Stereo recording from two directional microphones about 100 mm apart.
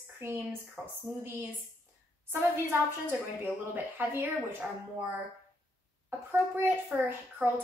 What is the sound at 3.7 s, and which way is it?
Speech, 15° right (ahead or behind).